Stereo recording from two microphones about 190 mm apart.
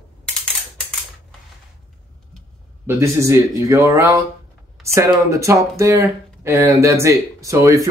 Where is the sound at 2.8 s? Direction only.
15° right (ahead or behind).